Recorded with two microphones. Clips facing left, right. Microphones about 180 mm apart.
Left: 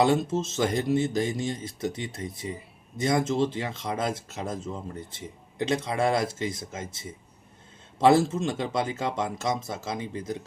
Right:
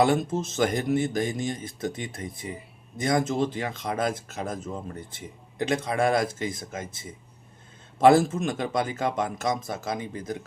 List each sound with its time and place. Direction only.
0.3 s speech: 25° left (ahead or behind)